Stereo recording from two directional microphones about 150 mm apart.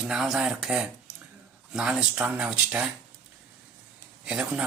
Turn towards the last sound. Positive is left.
turn(degrees=-5)  # may be behind; listen again after turning